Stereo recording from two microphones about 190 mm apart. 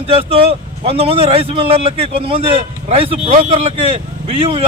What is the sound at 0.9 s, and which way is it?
A man's voice, 30° right (ahead or behind).